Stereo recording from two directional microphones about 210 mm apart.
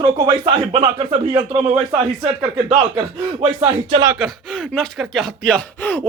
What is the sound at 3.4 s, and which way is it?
Speech, 25° right (ahead or behind).